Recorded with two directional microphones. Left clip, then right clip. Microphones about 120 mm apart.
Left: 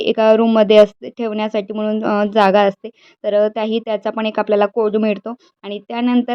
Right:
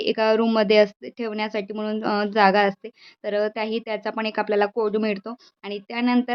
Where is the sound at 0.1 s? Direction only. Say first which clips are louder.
Left 8 dB; 35° left (ahead or behind).